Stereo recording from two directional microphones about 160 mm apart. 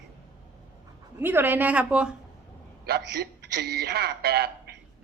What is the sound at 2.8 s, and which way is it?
A man's voice, 85° right.